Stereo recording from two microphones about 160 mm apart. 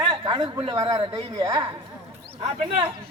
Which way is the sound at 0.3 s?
25° right (ahead or behind).